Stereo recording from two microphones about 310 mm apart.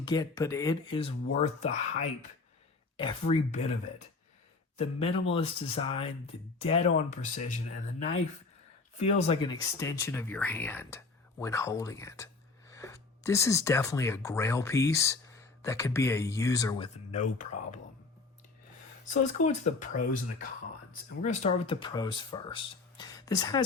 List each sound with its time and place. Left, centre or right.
0.0 s speech: centre
3.0 s speech: centre
9.0 s speech: left
19.0 s speech: left
21.2 s speech: left